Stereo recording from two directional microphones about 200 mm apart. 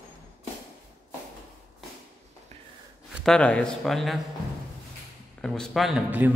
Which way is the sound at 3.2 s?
5° left (ahead or behind).